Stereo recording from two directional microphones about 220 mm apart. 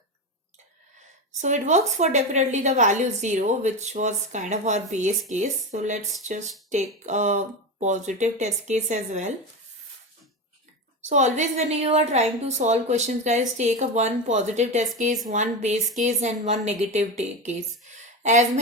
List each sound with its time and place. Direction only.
1.4 s a woman's voice: 35° right (ahead or behind)
11.0 s a woman's voice: 30° right (ahead or behind)